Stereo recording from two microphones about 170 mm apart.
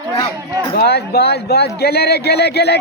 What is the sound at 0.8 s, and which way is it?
Speech, 70° left (ahead or behind).